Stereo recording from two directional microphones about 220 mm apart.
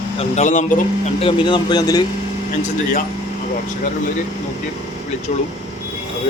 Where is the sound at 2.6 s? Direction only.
35° left (ahead or behind).